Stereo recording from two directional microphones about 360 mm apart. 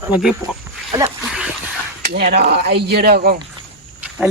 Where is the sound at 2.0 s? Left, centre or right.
Right.